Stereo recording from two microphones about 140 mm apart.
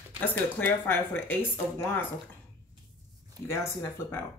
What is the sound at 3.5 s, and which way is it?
Speech, 20° left (ahead or behind).